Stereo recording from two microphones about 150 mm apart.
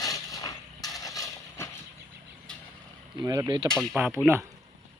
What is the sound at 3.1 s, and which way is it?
Speech, 25° right (ahead or behind).